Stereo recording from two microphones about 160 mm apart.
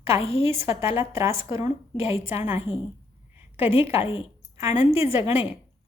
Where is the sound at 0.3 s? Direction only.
15° right (ahead or behind).